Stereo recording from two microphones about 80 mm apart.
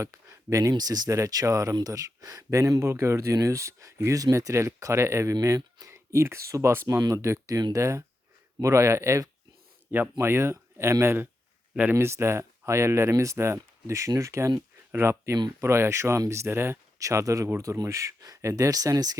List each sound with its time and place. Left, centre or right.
0.0 s speech: right
0.7 s speech: right
9.9 s speech: right
11.7 s speech: centre
11.9 s speech: right
17.0 s speech: right